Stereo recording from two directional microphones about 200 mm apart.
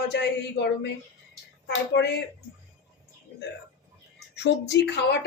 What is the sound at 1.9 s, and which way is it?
Speech, 55° left (ahead or behind).